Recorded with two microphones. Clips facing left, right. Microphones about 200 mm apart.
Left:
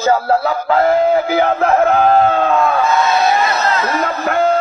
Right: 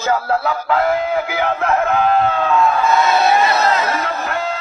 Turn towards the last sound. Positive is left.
turn(degrees=50)  # may be behind; listen again after turning